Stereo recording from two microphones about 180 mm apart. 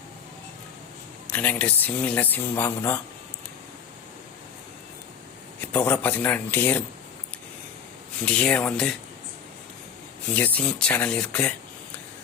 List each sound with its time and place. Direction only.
1.3 s speech: 10° left (ahead or behind)
5.5 s speech: 10° left (ahead or behind)
8.2 s speech: 5° left (ahead or behind)
10.3 s speech: 10° left (ahead or behind)